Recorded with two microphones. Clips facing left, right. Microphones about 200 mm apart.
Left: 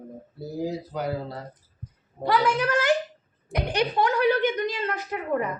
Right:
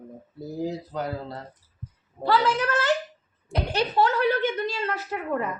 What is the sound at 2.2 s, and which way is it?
A woman's voice, 15° left (ahead or behind).